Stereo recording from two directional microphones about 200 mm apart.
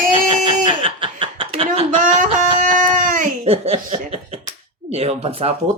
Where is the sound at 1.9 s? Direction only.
40° right (ahead or behind).